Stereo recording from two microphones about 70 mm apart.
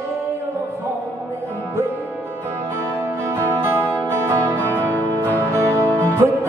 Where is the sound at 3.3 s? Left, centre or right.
Right.